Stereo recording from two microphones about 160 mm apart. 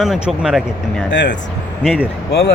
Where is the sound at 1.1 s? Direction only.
90° left.